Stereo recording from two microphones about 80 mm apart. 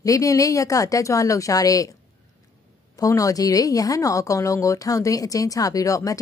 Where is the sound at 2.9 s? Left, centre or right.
Left.